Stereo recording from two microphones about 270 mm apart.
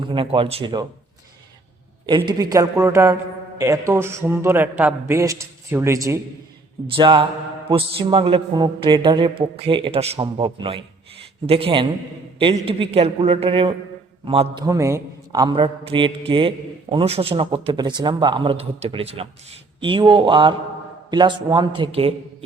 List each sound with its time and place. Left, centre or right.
0.0 s a man's voice: centre
2.0 s a man's voice: centre